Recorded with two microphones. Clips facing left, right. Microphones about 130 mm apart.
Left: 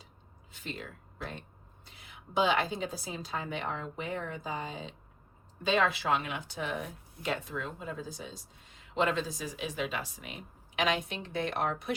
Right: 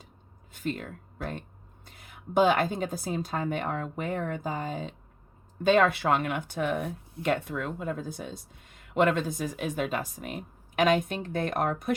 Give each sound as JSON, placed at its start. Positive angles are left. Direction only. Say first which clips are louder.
{"t": 0.5, "sound": "speech", "louder": "right 9 dB", "side_deg": -50}